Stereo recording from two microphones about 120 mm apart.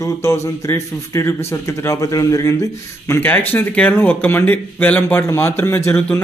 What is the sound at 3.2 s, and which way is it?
Speech, 15° left (ahead or behind).